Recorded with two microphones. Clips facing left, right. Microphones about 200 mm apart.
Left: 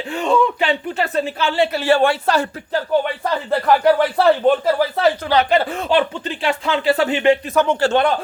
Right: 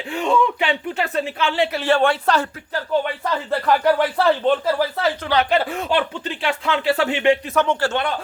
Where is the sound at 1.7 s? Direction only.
5° left (ahead or behind).